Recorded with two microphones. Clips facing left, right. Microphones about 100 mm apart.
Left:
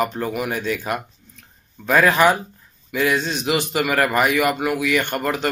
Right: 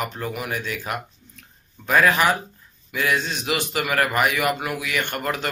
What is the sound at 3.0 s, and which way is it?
Speech, 25° left (ahead or behind).